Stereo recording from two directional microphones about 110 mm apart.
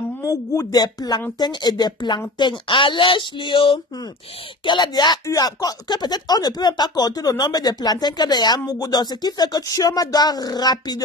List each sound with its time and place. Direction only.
0.2 s speech: 30° left (ahead or behind)